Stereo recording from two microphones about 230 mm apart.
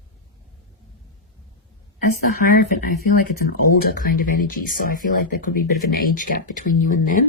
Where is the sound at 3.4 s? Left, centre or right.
Left.